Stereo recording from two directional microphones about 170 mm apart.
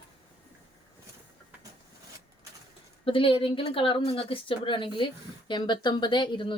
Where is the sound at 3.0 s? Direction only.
30° left (ahead or behind).